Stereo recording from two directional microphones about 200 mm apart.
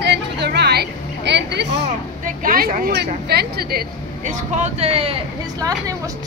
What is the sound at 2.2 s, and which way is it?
Speech, 45° right (ahead or behind).